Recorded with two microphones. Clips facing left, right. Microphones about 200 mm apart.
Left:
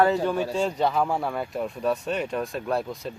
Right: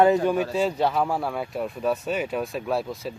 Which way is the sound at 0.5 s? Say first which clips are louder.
Right 1 dB; 5° right (ahead or behind).